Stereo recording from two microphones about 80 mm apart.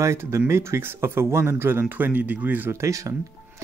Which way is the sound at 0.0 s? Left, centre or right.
Right.